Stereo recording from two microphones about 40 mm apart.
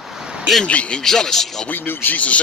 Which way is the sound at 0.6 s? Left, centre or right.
Left.